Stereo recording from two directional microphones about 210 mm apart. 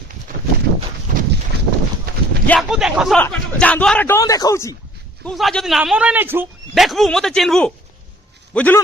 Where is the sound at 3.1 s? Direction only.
5° left (ahead or behind).